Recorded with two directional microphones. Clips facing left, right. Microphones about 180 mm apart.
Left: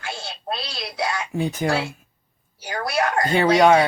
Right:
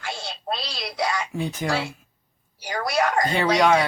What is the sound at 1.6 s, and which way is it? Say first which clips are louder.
Speech: left 3 dB; 50° left (ahead or behind).